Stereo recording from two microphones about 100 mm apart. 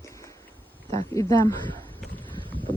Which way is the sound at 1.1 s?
30° left (ahead or behind).